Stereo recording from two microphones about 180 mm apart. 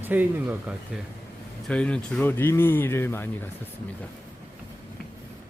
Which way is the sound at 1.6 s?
5° left (ahead or behind).